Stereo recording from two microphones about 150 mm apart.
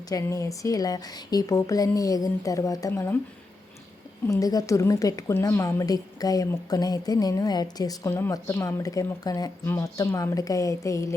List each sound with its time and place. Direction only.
0.1 s a woman's voice: 20° left (ahead or behind)
4.3 s a woman's voice: 25° left (ahead or behind)